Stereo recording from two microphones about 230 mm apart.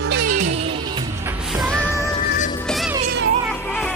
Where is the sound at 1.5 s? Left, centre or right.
Centre.